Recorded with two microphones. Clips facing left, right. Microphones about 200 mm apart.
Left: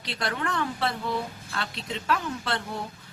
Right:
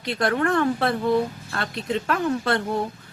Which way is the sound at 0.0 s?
50° right (ahead or behind).